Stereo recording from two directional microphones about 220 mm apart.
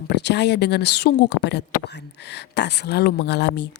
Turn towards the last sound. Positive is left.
turn(degrees=50)  # may be behind; listen again after turning